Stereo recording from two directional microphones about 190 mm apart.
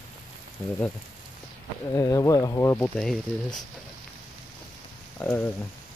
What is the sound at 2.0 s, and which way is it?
Speech, 15° left (ahead or behind).